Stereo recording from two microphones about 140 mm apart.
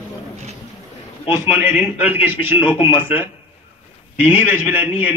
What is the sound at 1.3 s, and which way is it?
A man's voice, 15° right (ahead or behind).